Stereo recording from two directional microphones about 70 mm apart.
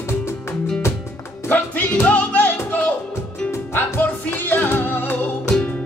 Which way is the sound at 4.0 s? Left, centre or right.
Left.